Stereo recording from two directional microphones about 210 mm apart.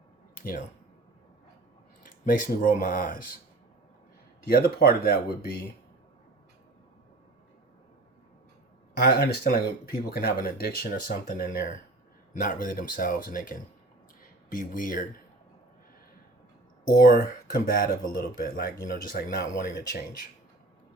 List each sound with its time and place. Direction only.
2.0 s speech: 40° left (ahead or behind)
4.4 s speech: 45° left (ahead or behind)
9.0 s speech: 50° left (ahead or behind)
17.0 s speech: 45° left (ahead or behind)